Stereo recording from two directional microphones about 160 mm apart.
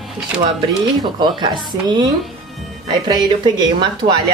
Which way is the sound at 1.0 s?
25° right (ahead or behind).